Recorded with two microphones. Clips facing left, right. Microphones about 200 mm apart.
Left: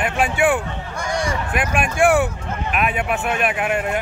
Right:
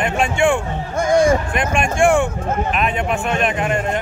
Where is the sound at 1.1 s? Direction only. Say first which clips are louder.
Right 10 dB; 45° right (ahead or behind).